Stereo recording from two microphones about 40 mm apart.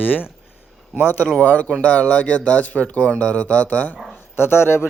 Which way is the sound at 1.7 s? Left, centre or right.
Left.